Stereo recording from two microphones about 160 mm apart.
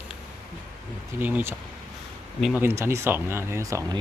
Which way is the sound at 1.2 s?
10° right (ahead or behind).